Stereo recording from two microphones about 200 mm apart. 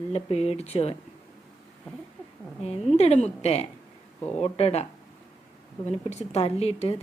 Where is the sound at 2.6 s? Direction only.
30° left (ahead or behind).